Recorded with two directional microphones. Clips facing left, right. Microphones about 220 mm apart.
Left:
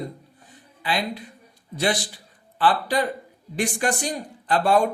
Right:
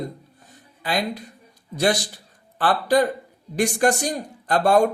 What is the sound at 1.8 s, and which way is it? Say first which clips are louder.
Speech: right 3 dB; 45° right (ahead or behind).